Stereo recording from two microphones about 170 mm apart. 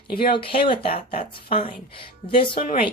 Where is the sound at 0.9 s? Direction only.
55° left (ahead or behind).